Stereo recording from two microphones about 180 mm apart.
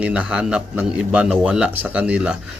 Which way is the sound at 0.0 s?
5° right (ahead or behind).